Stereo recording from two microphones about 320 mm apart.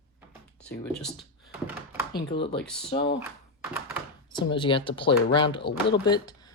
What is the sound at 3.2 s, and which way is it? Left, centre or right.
Typing, centre.